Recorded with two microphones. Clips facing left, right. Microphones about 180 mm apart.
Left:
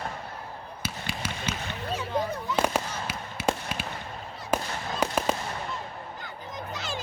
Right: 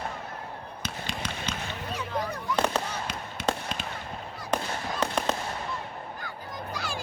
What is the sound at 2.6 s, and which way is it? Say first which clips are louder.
Fireworks: left 1 dB; 10° left (ahead or behind).